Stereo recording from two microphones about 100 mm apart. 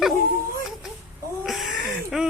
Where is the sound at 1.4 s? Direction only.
Centre (ahead or behind).